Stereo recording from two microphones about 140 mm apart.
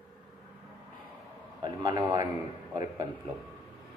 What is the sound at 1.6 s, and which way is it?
Speech, 30° right (ahead or behind).